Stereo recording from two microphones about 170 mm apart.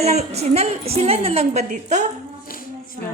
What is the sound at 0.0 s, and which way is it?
A woman's voice, 40° right (ahead or behind).